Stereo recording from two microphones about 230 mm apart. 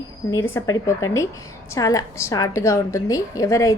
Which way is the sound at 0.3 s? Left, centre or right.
Centre.